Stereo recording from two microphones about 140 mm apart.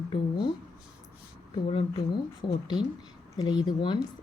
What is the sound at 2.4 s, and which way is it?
Speech, 30° left (ahead or behind).